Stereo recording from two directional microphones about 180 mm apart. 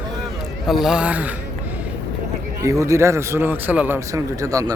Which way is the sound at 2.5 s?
15° right (ahead or behind).